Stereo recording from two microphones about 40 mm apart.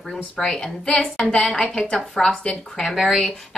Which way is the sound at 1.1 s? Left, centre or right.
Centre.